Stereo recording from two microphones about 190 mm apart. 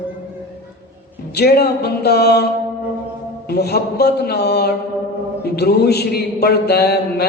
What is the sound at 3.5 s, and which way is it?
Mantra, 55° left (ahead or behind).